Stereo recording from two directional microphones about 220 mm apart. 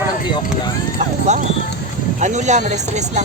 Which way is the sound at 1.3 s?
30° right (ahead or behind).